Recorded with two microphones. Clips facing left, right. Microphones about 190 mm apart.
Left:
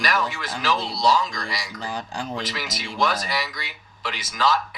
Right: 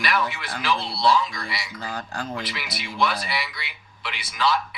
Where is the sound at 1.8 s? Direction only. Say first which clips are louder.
Left 1 dB; 15° left (ahead or behind).